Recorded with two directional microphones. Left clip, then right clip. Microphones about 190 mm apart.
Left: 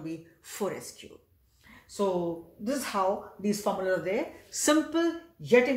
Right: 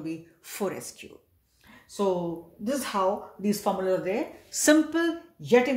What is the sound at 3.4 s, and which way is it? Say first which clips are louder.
A woman's voice: right 2 dB; 40° right (ahead or behind).